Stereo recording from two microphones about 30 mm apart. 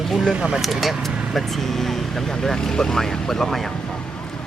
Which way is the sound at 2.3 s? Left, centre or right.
Left.